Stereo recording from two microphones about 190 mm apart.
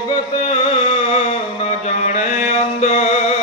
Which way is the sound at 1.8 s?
35° left (ahead or behind).